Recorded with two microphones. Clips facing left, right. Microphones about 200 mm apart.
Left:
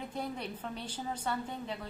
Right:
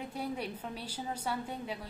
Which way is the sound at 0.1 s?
10° right (ahead or behind).